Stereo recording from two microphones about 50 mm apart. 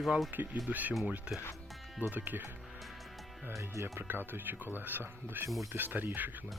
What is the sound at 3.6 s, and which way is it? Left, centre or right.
Speech, right.